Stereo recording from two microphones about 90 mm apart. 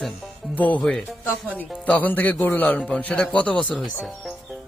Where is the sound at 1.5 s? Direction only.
15° left (ahead or behind).